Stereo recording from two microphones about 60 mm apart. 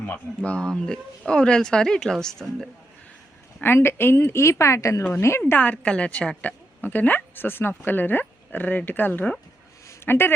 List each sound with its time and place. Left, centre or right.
0.0 s a woman's voice: left
0.7 s speech: centre
3.8 s a woman's voice: left
5.4 s a woman's voice: left
6.8 s speech: left